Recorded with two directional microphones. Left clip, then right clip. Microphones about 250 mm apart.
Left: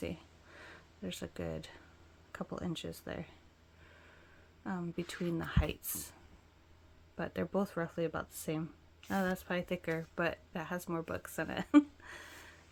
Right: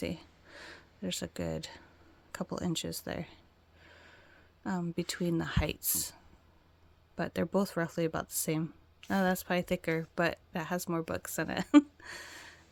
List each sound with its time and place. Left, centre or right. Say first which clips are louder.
0.0 s a sound: right 4 dB; right
2.3 s speech: right 5 dB; right
4.6 s speech: right 5 dB; right
7.2 s speech: right 4 dB; right